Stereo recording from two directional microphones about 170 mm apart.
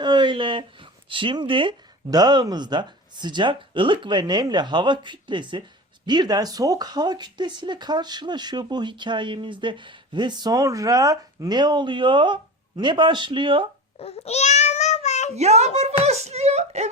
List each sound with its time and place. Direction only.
0.0 s a sound: 25° right (ahead or behind)
1.1 s speech: 30° right (ahead or behind)
14.0 s babbling: 35° left (ahead or behind)
15.4 s speech: 40° right (ahead or behind)